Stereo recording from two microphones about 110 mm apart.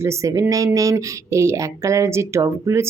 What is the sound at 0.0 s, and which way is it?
Speech, 30° right (ahead or behind).